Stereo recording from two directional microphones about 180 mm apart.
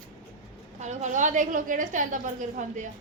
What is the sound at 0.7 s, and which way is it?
A woman's voice, 40° right (ahead or behind).